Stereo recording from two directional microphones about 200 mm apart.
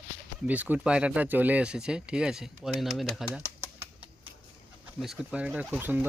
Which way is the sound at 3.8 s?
25° right (ahead or behind).